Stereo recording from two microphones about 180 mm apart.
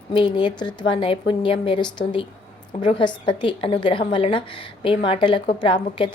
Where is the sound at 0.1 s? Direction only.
30° left (ahead or behind).